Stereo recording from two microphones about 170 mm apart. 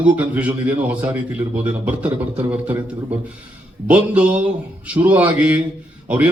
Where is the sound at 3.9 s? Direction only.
10° right (ahead or behind).